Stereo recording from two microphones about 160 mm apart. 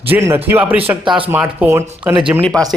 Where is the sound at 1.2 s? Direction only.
10° right (ahead or behind).